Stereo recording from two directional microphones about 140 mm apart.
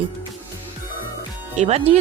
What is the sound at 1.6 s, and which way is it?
Speech, 50° right (ahead or behind).